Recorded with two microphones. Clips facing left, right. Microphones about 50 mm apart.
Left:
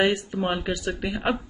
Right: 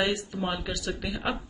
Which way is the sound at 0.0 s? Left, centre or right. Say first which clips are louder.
Left 5 dB; left.